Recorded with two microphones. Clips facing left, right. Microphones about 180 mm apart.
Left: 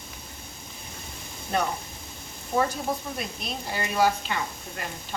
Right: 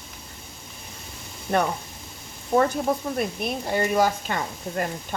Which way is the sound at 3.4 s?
55° right (ahead or behind).